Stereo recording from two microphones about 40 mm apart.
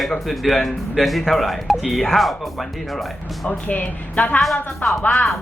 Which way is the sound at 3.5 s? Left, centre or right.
Left.